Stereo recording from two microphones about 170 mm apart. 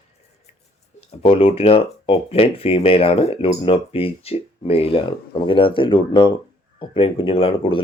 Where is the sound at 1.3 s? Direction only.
35° left (ahead or behind).